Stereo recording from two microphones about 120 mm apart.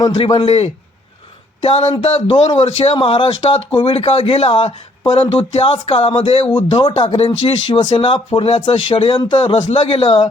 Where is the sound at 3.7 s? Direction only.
40° left (ahead or behind).